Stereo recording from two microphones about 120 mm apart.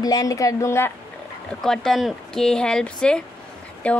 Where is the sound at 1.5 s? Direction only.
5° left (ahead or behind).